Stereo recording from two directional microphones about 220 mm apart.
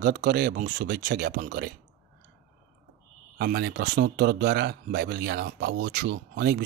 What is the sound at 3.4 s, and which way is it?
Speech, 45° right (ahead or behind).